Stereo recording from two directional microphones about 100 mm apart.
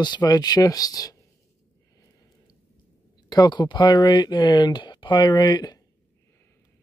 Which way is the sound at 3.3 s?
45° left (ahead or behind).